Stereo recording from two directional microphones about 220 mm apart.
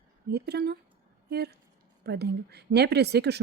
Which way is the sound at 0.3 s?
45° right (ahead or behind).